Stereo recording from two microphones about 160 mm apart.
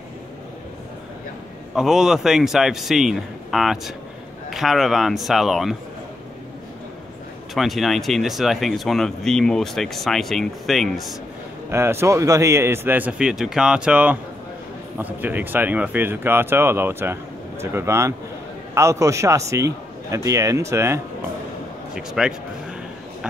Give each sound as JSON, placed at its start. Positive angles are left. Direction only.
{"t": 1.8, "sound": "speech", "side_deg": -5}
{"t": 7.5, "sound": "speech", "side_deg": 0}
{"t": 11.7, "sound": "a man's voice", "side_deg": -15}
{"t": 21.9, "sound": "speech", "side_deg": -5}